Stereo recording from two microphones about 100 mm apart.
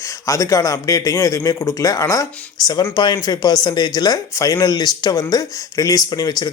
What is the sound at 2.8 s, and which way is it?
Speech, 45° left (ahead or behind).